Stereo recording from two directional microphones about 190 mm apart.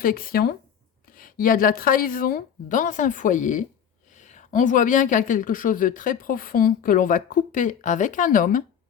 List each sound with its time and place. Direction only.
0.0 s speech: 50° left (ahead or behind)